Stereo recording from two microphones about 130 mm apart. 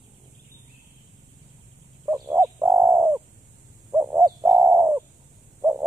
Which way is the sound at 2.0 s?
25° right (ahead or behind).